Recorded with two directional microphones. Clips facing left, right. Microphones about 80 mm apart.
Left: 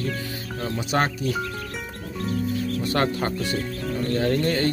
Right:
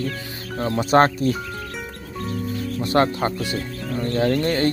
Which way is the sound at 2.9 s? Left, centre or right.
Right.